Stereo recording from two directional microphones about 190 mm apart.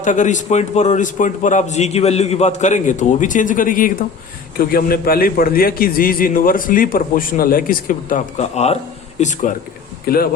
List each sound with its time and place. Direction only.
0.0 s a man's voice: 40° left (ahead or behind)
10.1 s a man's voice: 50° left (ahead or behind)